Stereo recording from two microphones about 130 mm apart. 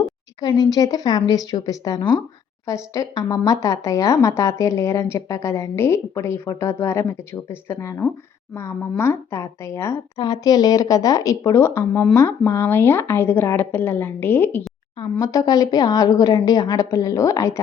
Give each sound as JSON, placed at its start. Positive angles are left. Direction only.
{"t": 0.0, "sound": "a woman's voice", "side_deg": 30}
{"t": 15.2, "sound": "speech", "side_deg": 30}